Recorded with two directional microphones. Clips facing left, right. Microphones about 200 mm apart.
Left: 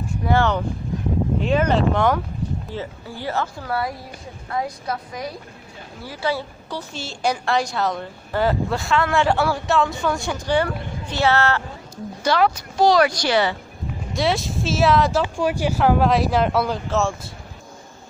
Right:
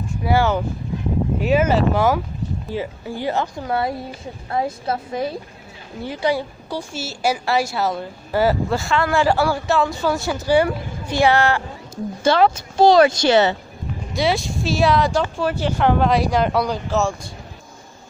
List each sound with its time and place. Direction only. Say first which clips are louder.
0.2 s a woman's voice: right 1 dB; 10° right (ahead or behind); by 5.4 s 25° right (ahead or behind)
6.0 s a woman's voice: right 4 dB; 15° right (ahead or behind)
12.2 s a woman's voice: right 3 dB; 25° right (ahead or behind)
14.1 s speech: right 1 dB; centre (ahead or behind)
15.2 s speech: even; 15° left (ahead or behind)